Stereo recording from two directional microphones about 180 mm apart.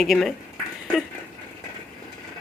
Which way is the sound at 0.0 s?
Centre (ahead or behind).